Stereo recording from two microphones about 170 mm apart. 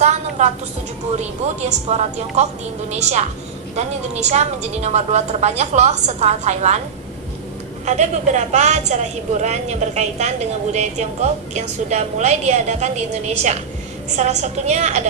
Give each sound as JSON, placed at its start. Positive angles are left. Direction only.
{"t": 0.0, "sound": "a sound", "side_deg": -40}
{"t": 1.9, "sound": "a woman's voice", "side_deg": -40}
{"t": 7.9, "sound": "a woman's voice", "side_deg": -45}